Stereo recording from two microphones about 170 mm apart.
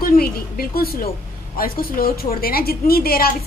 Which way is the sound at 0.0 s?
60° left (ahead or behind).